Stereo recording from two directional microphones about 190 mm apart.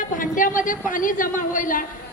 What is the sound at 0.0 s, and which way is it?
A woman's voice, 45° left (ahead or behind).